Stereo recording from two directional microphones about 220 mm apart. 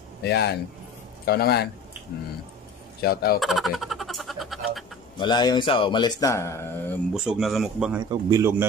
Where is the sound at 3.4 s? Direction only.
Centre (ahead or behind).